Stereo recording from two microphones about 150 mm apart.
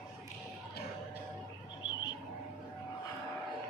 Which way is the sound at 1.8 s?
30° left (ahead or behind).